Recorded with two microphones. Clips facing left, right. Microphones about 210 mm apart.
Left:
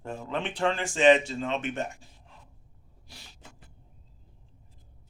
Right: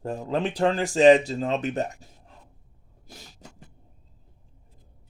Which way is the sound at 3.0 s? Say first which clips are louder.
Right 6 dB; 45° right (ahead or behind).